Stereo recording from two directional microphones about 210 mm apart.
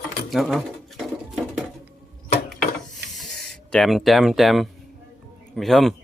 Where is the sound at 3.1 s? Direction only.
Centre (ahead or behind).